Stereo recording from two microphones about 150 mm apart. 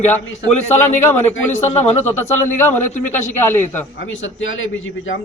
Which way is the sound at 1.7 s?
15° left (ahead or behind).